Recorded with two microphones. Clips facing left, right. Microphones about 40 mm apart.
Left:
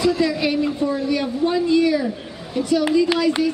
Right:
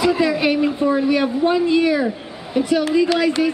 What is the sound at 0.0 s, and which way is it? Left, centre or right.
A woman's voice, right.